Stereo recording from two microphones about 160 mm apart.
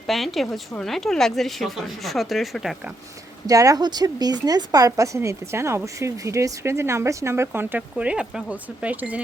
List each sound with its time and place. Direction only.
0.1 s speech: centre (ahead or behind)
3.4 s speech: 20° right (ahead or behind)